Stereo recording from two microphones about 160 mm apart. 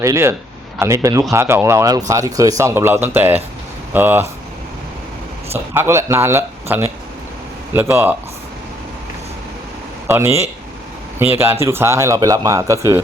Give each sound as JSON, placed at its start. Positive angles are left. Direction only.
{"t": 0.0, "sound": "speech", "side_deg": -15}
{"t": 5.5, "sound": "speech", "side_deg": -15}
{"t": 10.1, "sound": "speech", "side_deg": -15}